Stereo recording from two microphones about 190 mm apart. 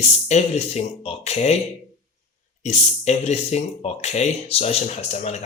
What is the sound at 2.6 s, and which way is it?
Speech, 35° left (ahead or behind).